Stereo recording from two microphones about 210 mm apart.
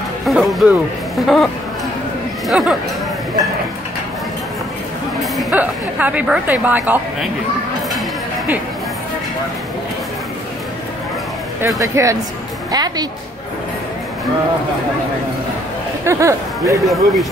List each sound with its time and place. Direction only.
0.2 s speech: centre (ahead or behind)
5.4 s a woman's voice: 5° right (ahead or behind)
11.6 s a woman's voice: 15° right (ahead or behind)
16.0 s speech: 15° right (ahead or behind)
16.8 s speech: centre (ahead or behind)